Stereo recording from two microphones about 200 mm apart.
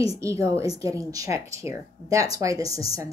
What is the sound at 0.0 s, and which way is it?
A woman's voice, 15° right (ahead or behind).